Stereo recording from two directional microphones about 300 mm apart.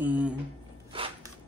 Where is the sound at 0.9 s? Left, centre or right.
Centre.